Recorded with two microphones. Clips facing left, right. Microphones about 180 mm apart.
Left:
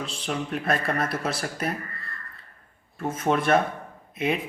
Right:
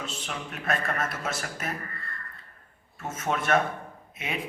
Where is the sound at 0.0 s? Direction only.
35° left (ahead or behind).